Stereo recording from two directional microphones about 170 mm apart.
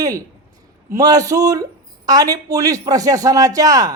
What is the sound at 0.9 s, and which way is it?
Speech, 20° right (ahead or behind).